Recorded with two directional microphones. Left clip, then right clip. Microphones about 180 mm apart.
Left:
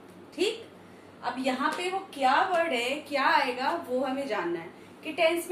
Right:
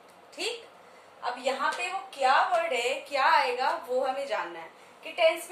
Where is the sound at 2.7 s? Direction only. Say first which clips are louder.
Right 1 dB; 20° right (ahead or behind).